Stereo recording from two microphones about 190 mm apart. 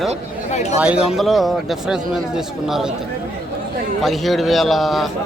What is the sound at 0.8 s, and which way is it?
Speech, 5° right (ahead or behind).